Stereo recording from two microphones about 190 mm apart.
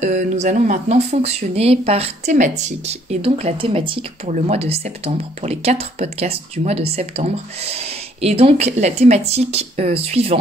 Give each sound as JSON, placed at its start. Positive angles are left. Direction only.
{"t": 0.0, "sound": "speech", "side_deg": -40}